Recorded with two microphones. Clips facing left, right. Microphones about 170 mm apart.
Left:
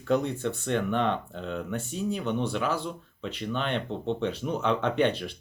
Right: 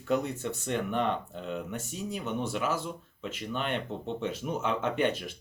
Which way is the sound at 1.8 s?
40° right (ahead or behind).